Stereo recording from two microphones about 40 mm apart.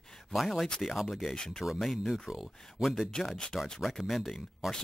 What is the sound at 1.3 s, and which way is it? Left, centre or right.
A woman's voice, centre.